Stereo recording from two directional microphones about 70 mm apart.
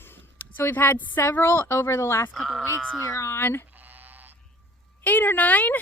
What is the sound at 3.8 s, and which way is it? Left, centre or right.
Sheep, right.